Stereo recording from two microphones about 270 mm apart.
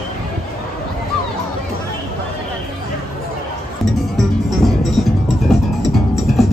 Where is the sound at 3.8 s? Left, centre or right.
Centre.